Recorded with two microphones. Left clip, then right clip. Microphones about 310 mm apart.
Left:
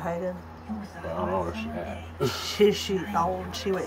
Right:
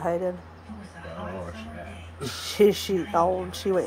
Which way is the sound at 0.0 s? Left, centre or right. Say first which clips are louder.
Right 4 dB; centre.